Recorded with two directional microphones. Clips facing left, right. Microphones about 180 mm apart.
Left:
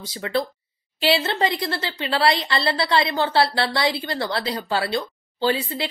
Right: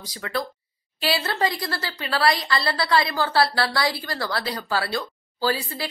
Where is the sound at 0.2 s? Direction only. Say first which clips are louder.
Left 4 dB; 25° left (ahead or behind).